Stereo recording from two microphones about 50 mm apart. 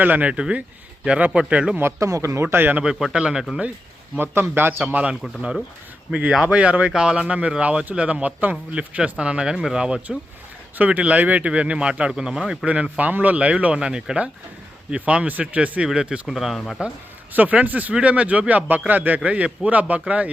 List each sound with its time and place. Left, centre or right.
0.0 s a man's voice: right
0.3 s speech: centre
2.0 s a man's voice: right
2.8 s speech: centre
4.2 s a man's voice: right
4.9 s a man's voice: right
6.4 s speech: right
10.8 s speech: right; by 12.5 s centre
12.6 s speech: right
16.2 s speech: centre
16.6 s speech: centre
17.3 s a man's voice: right